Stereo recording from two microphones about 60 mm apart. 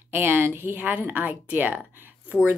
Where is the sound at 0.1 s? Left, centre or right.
Right.